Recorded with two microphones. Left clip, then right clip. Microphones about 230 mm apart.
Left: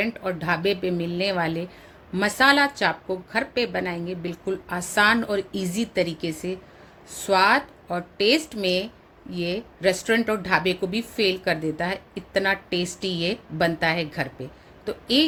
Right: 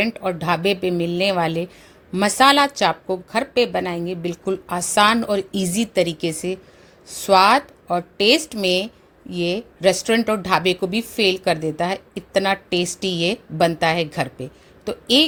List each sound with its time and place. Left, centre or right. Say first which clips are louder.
0.0 s a woman's voice: right 5 dB; right